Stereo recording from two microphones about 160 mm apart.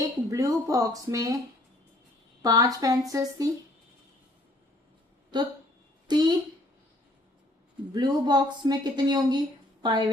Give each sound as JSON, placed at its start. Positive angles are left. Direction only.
{"t": 0.0, "sound": "a sound", "side_deg": -20}
{"t": 2.4, "sound": "speech", "side_deg": -25}
{"t": 5.3, "sound": "a woman's voice", "side_deg": -25}
{"t": 7.9, "sound": "a woman's voice", "side_deg": -25}